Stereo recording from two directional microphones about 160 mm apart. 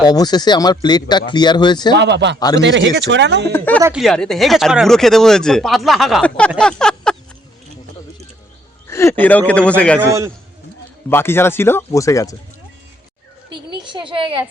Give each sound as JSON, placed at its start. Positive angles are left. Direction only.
{"t": 0.0, "sound": "speech", "side_deg": 25}
{"t": 2.0, "sound": "speech", "side_deg": -90}
{"t": 3.5, "sound": "speech", "side_deg": 10}
{"t": 6.6, "sound": "a sound", "side_deg": 5}
{"t": 8.9, "sound": "speech", "side_deg": 15}
{"t": 10.0, "sound": "a man's voice", "side_deg": -20}
{"t": 11.1, "sound": "speech", "side_deg": 15}
{"t": 13.7, "sound": "a sound", "side_deg": -30}